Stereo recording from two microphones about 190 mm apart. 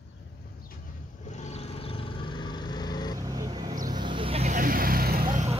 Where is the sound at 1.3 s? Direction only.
35° left (ahead or behind).